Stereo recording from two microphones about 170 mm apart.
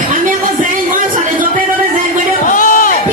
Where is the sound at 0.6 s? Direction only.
55° right (ahead or behind).